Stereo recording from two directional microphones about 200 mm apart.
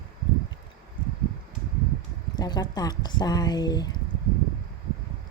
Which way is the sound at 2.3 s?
20° left (ahead or behind).